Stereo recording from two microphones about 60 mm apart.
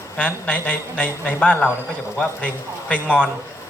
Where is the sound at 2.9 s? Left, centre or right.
Left.